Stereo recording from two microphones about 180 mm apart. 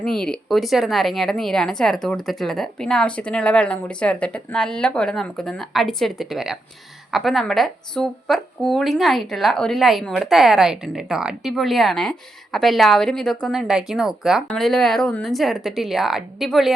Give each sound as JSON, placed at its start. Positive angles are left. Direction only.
{"t": 0.0, "sound": "speech", "side_deg": 5}